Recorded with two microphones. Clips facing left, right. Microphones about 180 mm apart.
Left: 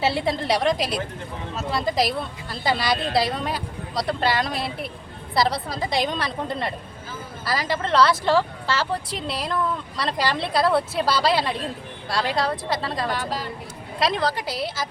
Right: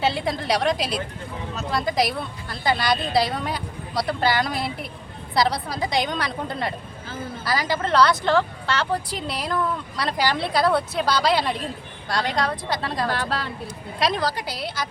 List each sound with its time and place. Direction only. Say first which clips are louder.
0.0 s a woman's voice: left 1 dB; 5° left (ahead or behind)
13.1 s speech: right 1 dB; 70° right (ahead or behind)
14.0 s a woman's voice: left 1 dB; centre (ahead or behind)